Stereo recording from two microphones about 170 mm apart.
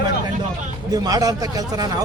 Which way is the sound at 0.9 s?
20° right (ahead or behind).